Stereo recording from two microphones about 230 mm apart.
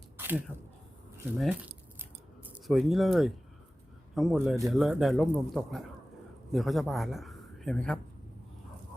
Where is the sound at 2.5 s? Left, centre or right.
Centre.